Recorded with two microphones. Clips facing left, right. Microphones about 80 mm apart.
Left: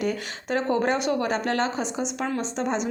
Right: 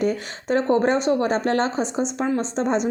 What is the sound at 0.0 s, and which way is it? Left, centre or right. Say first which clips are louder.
A woman's voice: right 4 dB; right.